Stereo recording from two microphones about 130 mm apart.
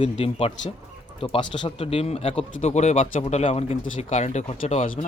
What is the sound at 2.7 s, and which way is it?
Speech, 60° left (ahead or behind).